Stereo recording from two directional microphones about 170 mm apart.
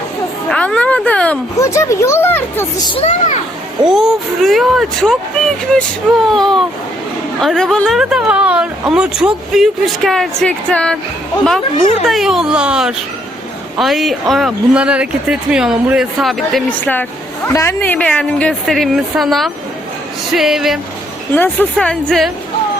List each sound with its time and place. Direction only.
0.5 s a woman's voice: 5° left (ahead or behind)
2.8 s speech: 30° left (ahead or behind)
3.8 s speech: centre (ahead or behind)
12.0 s a woman's voice: centre (ahead or behind)
21.3 s a woman's voice: 10° left (ahead or behind)